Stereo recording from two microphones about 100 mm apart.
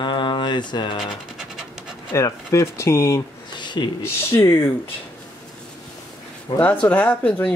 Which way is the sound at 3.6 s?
50° left (ahead or behind).